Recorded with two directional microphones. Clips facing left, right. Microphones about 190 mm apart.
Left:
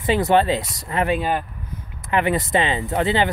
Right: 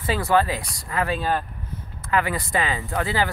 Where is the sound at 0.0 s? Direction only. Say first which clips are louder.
Left 4 dB; 20° left (ahead or behind).